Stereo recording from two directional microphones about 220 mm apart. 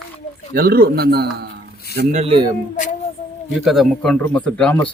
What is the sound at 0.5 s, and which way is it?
Speech, 45° right (ahead or behind).